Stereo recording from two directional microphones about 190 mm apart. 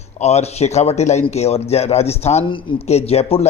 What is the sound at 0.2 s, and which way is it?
Speech, 35° left (ahead or behind).